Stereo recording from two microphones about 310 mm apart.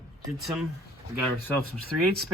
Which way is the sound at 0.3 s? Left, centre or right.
Centre.